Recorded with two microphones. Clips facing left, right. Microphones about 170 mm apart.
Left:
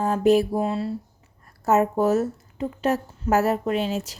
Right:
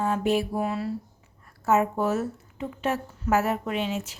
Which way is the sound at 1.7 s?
40° left (ahead or behind).